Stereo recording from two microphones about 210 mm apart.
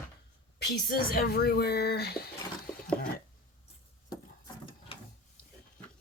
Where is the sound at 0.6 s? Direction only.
45° left (ahead or behind).